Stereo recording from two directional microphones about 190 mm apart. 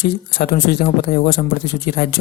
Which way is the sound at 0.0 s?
50° left (ahead or behind).